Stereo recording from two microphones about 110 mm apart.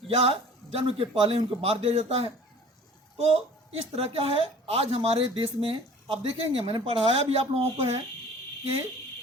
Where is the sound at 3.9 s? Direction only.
60° right (ahead or behind).